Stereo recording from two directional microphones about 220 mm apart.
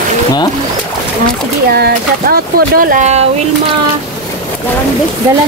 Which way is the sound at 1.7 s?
45° right (ahead or behind).